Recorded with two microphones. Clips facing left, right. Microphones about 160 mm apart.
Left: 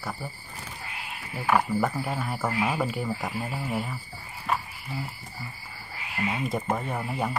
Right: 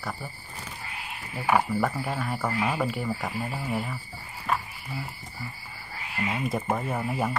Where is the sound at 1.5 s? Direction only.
Centre (ahead or behind).